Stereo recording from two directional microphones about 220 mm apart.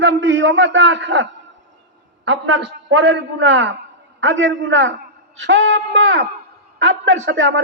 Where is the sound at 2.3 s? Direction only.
55° right (ahead or behind).